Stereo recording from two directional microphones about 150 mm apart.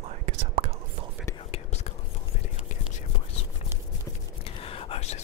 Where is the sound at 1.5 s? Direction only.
45° left (ahead or behind).